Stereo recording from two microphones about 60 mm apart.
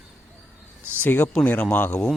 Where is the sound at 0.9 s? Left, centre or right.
Left.